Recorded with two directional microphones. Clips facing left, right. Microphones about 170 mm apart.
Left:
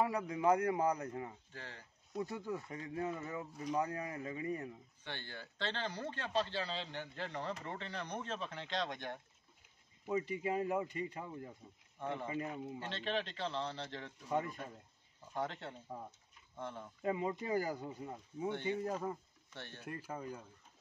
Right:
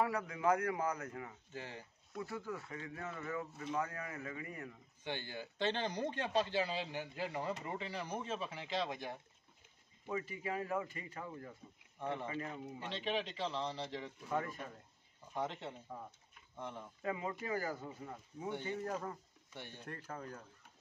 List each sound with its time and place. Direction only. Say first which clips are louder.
0.0 s a man's voice: left 1 dB; 15° left (ahead or behind)
1.5 s speech: right 4 dB; 15° right (ahead or behind)
2.1 s speech: left 3 dB; 20° left (ahead or behind)
5.0 s speech: right 5 dB; 15° right (ahead or behind)
10.1 s speech: left 4 dB; 20° left (ahead or behind)
12.0 s speech: even; centre (ahead or behind)
12.3 s speech: left 2 dB; 15° left (ahead or behind)
12.7 s speech: right 2 dB; centre (ahead or behind)
15.3 s speech: even; 5° right (ahead or behind)
17.3 s speech: left 3 dB; 20° left (ahead or behind)
19.5 s speech: even; 10° right (ahead or behind)
19.8 s speech: left 4 dB; 10° left (ahead or behind)